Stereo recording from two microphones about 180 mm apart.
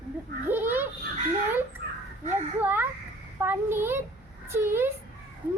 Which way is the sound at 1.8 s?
55° right (ahead or behind).